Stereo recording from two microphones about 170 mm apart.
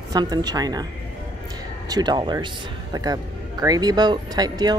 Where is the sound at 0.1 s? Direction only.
25° right (ahead or behind).